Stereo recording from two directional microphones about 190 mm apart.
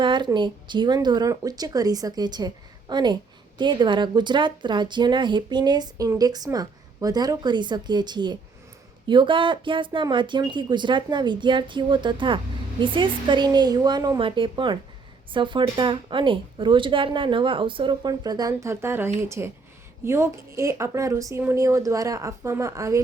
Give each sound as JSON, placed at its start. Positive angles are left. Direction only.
{"t": 0.0, "sound": "speech", "side_deg": -25}